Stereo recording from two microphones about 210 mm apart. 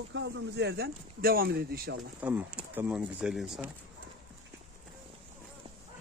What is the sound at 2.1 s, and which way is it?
Speech, 5° right (ahead or behind).